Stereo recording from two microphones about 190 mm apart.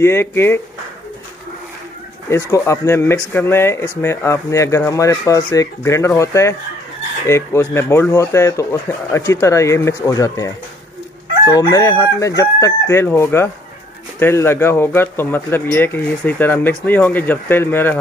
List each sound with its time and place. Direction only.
0.0 s speech: 15° left (ahead or behind)
2.2 s speech: 15° left (ahead or behind)